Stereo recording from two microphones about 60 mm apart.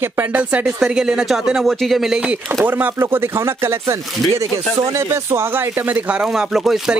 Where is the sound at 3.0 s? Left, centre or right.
Right.